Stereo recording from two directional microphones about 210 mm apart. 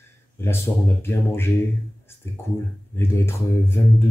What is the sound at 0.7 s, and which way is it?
Speech, 15° left (ahead or behind).